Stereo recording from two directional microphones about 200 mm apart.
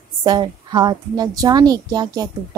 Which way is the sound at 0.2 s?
20° right (ahead or behind).